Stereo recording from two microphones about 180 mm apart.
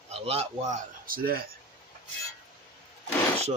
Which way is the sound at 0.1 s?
35° right (ahead or behind).